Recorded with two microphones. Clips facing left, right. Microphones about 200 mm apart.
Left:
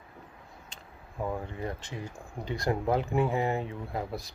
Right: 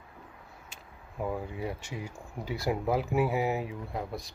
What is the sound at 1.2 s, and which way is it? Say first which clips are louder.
Speech: even; 5° right (ahead or behind).